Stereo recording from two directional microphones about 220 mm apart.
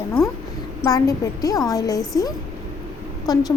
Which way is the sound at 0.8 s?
15° left (ahead or behind).